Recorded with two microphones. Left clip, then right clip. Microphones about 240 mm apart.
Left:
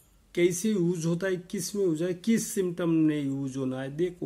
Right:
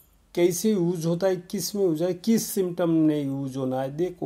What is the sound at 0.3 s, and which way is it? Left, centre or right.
Speech, centre.